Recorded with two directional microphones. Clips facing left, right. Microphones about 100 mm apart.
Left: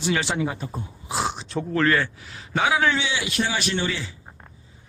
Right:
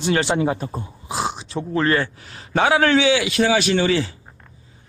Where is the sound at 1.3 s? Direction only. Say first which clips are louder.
Right 1 dB; 5° right (ahead or behind).